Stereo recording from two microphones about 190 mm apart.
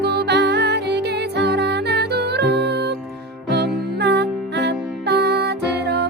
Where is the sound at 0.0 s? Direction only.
60° right (ahead or behind).